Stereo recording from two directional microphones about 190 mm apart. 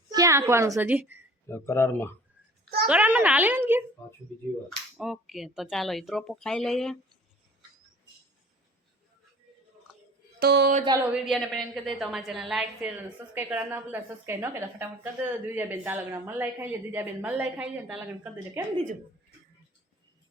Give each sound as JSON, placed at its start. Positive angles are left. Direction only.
{"t": 0.1, "sound": "a child's voice", "side_deg": -15}
{"t": 1.5, "sound": "speech", "side_deg": 15}
{"t": 2.8, "sound": "a woman's voice", "side_deg": -5}
{"t": 10.4, "sound": "speech", "side_deg": -60}
{"t": 11.0, "sound": "a woman's voice", "side_deg": -5}